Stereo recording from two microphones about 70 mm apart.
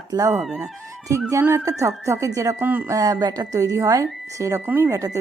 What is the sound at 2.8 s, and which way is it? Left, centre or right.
Speech, right.